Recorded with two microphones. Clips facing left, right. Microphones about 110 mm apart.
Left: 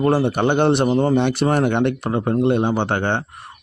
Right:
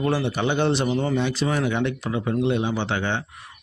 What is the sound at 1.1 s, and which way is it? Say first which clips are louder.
Speech: left 6 dB; 60° left (ahead or behind).